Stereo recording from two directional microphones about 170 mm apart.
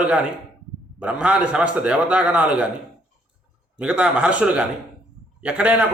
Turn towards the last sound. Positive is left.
turn(degrees=-5)  # may be behind; listen again after turning